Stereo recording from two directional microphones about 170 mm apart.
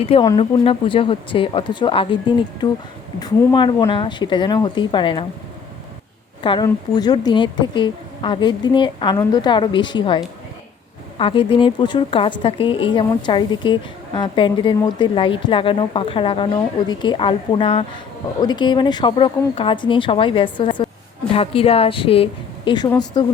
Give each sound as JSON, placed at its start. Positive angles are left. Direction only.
{"t": 0.2, "sound": "a woman's voice", "side_deg": 25}
{"t": 3.2, "sound": "a woman's voice", "side_deg": 25}
{"t": 6.4, "sound": "a woman's voice", "side_deg": 30}